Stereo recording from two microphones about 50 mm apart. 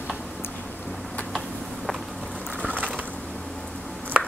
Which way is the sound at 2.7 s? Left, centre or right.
Right.